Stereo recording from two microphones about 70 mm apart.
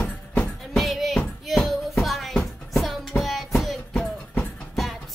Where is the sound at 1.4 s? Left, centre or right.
Centre.